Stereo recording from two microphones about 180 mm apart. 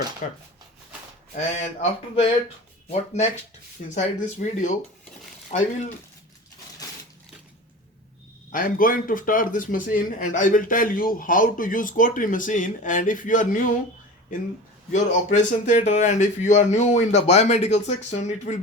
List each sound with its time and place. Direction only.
0.2 s speech: 45° left (ahead or behind)
1.5 s speech: 40° left (ahead or behind)
3.9 s speech: 45° left (ahead or behind)
8.5 s speech: 50° left (ahead or behind)
14.9 s speech: 45° left (ahead or behind)